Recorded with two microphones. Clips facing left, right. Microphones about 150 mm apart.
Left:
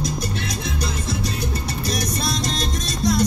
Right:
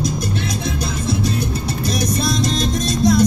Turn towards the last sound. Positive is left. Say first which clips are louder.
# right 6 dB
turn(degrees=-50)  # may be behind; listen again after turning